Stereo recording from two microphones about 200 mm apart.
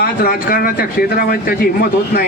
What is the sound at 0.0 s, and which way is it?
Speech, 50° left (ahead or behind).